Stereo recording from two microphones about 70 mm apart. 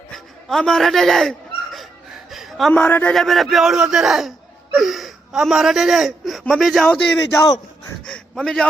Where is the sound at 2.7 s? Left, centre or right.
Left.